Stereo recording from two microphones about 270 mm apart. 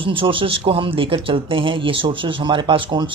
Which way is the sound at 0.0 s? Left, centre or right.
Centre.